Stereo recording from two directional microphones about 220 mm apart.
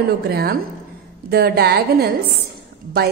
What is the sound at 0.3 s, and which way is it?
A woman's voice, 45° right (ahead or behind).